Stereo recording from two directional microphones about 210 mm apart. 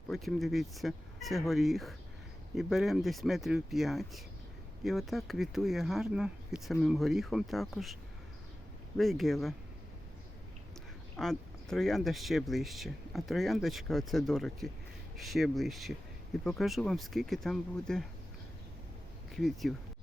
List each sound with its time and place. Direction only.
0.1 s speech: centre (ahead or behind)
9.0 s speech: centre (ahead or behind)
11.2 s speech: centre (ahead or behind)
19.3 s speech: centre (ahead or behind)